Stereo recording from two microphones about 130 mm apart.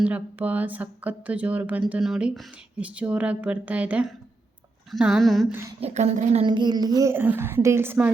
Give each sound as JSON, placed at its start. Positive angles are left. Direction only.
{"t": 0.0, "sound": "speech", "side_deg": -10}
{"t": 5.5, "sound": "a sound", "side_deg": -20}
{"t": 5.8, "sound": "a woman's voice", "side_deg": -55}
{"t": 6.4, "sound": "child singing", "side_deg": -35}
{"t": 7.1, "sound": "speech", "side_deg": -15}